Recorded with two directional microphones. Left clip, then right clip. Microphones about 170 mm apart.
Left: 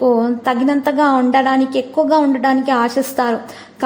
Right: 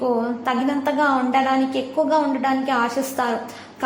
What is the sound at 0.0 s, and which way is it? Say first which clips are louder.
A woman's voice: left 7 dB; 35° left (ahead or behind).